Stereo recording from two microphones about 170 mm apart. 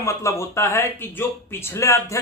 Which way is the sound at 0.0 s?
15° left (ahead or behind).